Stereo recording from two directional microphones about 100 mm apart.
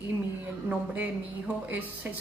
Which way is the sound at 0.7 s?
15° right (ahead or behind).